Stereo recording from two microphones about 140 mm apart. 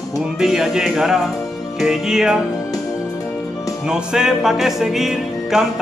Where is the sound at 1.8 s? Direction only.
5° right (ahead or behind).